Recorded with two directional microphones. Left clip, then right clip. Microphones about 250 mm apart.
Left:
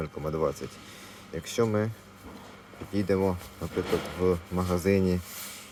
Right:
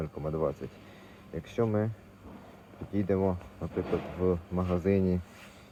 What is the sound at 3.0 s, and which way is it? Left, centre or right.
Speech, centre.